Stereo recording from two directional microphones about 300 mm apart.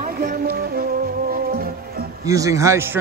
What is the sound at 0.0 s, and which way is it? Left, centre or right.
Music, right.